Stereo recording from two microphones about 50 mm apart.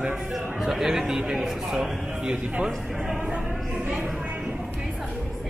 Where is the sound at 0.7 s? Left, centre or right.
Centre.